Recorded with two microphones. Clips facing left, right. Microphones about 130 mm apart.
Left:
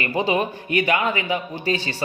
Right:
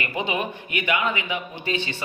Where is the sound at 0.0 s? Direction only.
35° left (ahead or behind).